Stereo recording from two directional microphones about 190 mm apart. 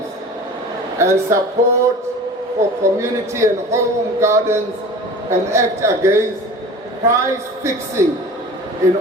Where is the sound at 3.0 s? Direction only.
15° right (ahead or behind).